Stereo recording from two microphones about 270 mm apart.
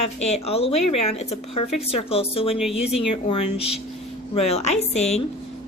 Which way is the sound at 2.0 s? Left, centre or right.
Left.